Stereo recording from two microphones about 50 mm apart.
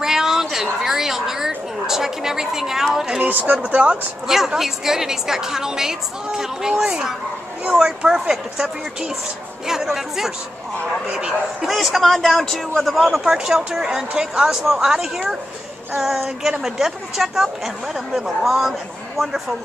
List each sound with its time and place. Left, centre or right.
0.0 s a sound: centre
1.9 s a man's voice: centre
3.2 s speech: right
4.6 s a man's voice: centre
11.6 s a man's voice: centre
16.4 s a man's voice: centre